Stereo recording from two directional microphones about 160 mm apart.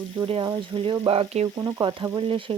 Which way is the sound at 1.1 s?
40° right (ahead or behind).